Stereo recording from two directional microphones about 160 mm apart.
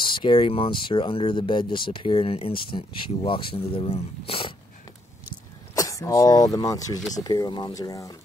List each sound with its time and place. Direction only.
0.0 s speech: 30° left (ahead or behind)
5.8 s speech: 20° left (ahead or behind)